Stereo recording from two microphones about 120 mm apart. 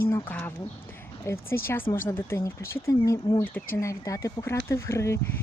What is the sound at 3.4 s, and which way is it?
Speech, 15° left (ahead or behind).